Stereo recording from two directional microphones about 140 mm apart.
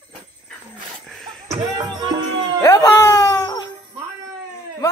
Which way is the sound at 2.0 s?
30° right (ahead or behind).